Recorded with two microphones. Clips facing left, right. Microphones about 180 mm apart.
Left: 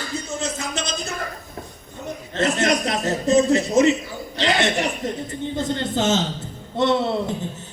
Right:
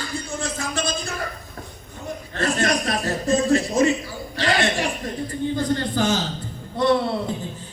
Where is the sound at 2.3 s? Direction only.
20° left (ahead or behind).